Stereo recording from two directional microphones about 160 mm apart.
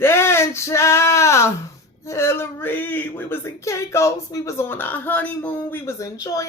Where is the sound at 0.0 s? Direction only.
15° left (ahead or behind).